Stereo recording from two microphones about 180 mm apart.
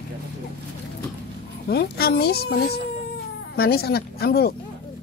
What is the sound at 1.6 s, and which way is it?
Speech, 60° left (ahead or behind).